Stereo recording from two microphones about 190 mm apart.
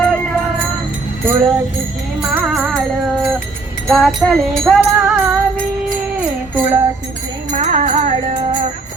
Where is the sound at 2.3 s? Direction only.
5° right (ahead or behind).